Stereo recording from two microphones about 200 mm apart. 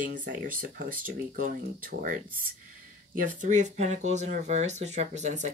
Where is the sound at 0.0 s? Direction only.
40° right (ahead or behind).